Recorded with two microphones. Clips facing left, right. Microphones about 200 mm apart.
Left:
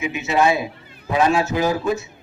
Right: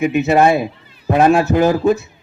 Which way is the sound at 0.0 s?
55° right (ahead or behind).